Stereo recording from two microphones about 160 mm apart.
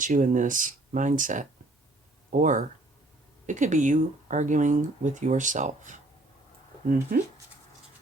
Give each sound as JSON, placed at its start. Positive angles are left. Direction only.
{"t": 0.0, "sound": "speech", "side_deg": -55}